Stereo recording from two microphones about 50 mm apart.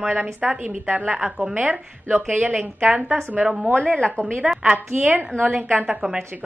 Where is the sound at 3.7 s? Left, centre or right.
Left.